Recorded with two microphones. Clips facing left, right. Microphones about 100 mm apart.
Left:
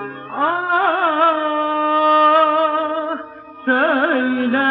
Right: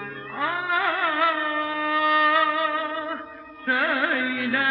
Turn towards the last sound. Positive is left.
turn(degrees=40)  # may be behind; listen again after turning